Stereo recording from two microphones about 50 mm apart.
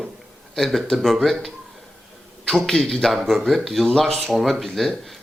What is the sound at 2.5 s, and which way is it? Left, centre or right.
Speech, centre.